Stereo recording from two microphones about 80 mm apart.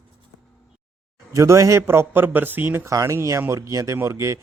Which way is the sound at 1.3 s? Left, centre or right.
Right.